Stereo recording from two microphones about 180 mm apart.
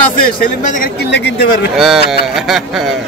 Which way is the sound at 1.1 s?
85° left.